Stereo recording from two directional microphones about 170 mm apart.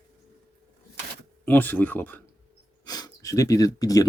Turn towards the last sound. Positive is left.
turn(degrees=20)  # may be behind; listen again after turning